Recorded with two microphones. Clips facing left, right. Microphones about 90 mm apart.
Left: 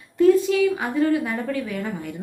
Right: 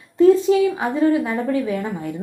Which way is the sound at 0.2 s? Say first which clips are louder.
Right 3 dB; 25° right (ahead or behind).